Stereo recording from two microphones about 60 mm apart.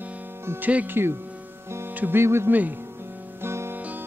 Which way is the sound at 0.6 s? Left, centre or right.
Right.